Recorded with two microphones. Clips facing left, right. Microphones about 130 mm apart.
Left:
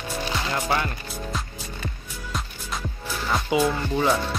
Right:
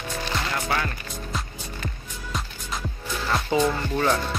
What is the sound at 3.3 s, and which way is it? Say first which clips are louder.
Speech: even; 10° left (ahead or behind).